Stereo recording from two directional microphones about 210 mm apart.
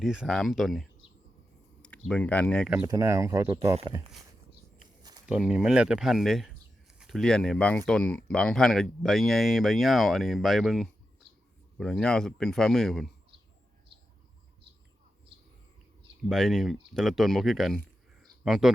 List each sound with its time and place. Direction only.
0.0 s speech: centre (ahead or behind)
2.8 s speech: 15° right (ahead or behind)
5.3 s speech: 5° right (ahead or behind)
16.3 s speech: centre (ahead or behind)
18.2 s a sound: centre (ahead or behind)